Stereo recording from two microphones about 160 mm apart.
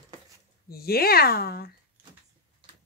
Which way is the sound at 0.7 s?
70° left (ahead or behind).